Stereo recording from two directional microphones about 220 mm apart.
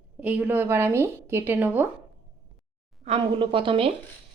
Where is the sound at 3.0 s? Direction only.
25° right (ahead or behind).